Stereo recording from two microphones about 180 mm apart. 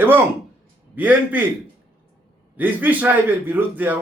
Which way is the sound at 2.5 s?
10° right (ahead or behind).